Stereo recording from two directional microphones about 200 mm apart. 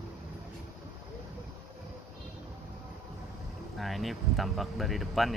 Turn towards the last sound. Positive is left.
turn(degrees=0)  # may be behind; listen again after turning